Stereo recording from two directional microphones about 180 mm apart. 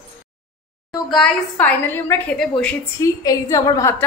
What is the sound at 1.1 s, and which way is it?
A woman's voice, 5° left (ahead or behind).